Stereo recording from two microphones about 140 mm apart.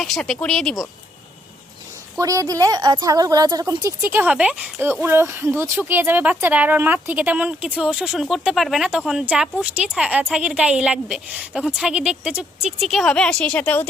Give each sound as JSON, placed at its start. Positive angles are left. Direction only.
{"t": 0.0, "sound": "speech", "side_deg": 0}
{"t": 2.1, "sound": "a woman's voice", "side_deg": -25}
{"t": 4.0, "sound": "a woman's voice", "side_deg": -15}